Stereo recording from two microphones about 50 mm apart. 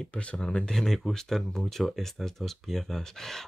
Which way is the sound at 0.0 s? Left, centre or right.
Left.